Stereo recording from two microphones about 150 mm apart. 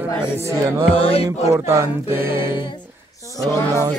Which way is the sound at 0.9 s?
40° left (ahead or behind).